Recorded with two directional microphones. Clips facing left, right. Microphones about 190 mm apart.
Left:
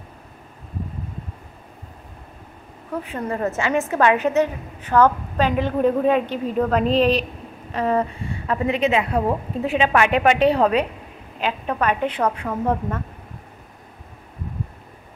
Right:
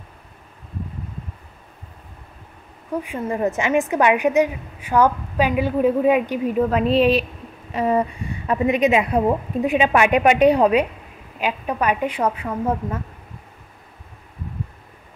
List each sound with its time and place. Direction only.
3.0 s a woman's voice: 10° right (ahead or behind)